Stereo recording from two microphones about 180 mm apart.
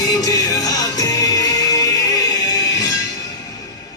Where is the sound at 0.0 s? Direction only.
20° left (ahead or behind).